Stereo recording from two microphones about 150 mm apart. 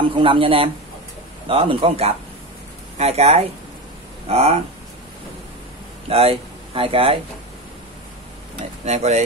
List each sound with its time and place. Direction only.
0.0 s speech: 35° right (ahead or behind)
6.0 s speech: 40° right (ahead or behind)
8.8 s speech: 45° right (ahead or behind)